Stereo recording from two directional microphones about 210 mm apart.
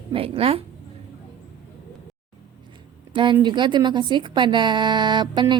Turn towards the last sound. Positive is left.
turn(degrees=-20)  # may be behind; listen again after turning